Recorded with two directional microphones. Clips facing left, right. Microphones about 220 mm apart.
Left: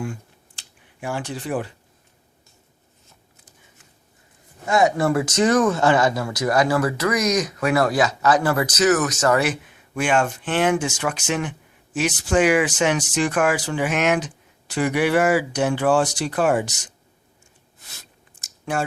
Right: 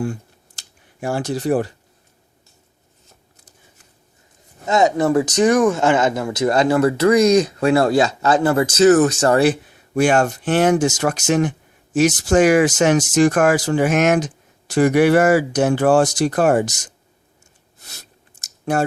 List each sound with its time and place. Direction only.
0.0 s computer keyboard: 40° right (ahead or behind)
4.6 s speech: 20° right (ahead or behind); by 16.9 s 45° right (ahead or behind)
17.8 s clicking: 40° right (ahead or behind)